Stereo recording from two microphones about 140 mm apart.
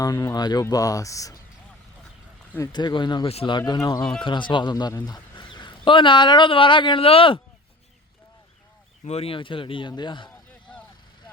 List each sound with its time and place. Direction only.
0.0 s speech: 25° left (ahead or behind)
2.7 s a man's voice: 30° left (ahead or behind)
3.7 s a man's voice: 30° left (ahead or behind)
9.0 s a man's voice: 45° left (ahead or behind)
10.7 s vehicle: 10° left (ahead or behind)